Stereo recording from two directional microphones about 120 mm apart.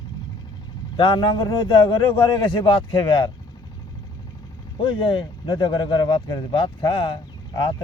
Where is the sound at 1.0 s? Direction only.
45° left (ahead or behind).